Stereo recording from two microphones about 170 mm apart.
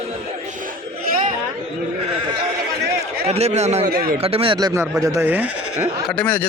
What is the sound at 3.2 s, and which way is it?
Speech, 40° right (ahead or behind).